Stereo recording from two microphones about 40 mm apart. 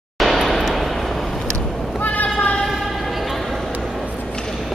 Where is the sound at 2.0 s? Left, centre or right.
Left.